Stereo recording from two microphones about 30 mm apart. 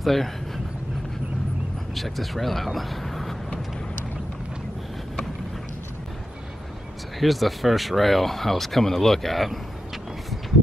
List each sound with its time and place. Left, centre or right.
0.0 s speech: centre
2.0 s speech: centre
7.2 s speech: centre